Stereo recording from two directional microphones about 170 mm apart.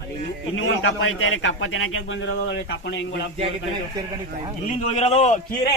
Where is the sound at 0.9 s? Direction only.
90° left.